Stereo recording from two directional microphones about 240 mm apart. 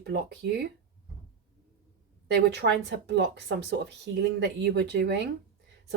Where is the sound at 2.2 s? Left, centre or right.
Right.